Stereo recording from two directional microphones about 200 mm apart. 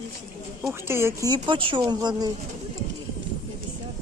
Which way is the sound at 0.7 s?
10° right (ahead or behind).